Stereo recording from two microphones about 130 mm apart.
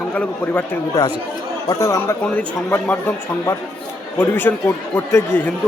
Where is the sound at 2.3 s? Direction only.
15° left (ahead or behind).